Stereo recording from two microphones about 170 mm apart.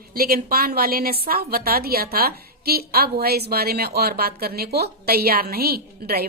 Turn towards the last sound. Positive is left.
turn(degrees=-65)  # may be behind; listen again after turning